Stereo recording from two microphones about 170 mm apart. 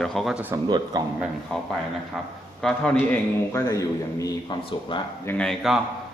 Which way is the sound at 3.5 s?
20° left (ahead or behind).